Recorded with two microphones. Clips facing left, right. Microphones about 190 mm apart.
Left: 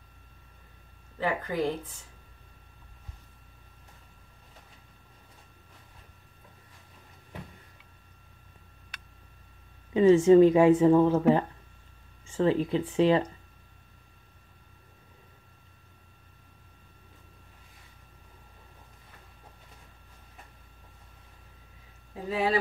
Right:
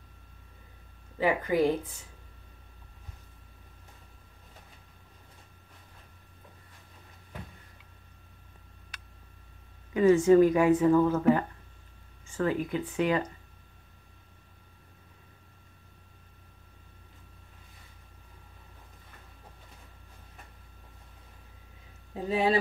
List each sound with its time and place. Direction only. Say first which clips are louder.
1.2 s speech: right 4 dB; 10° right (ahead or behind)
9.9 s speech: left 2 dB; 25° left (ahead or behind)
22.3 s speech: right 1 dB; 20° right (ahead or behind)